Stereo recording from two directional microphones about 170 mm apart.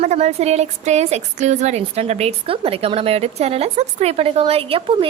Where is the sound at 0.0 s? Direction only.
40° right (ahead or behind).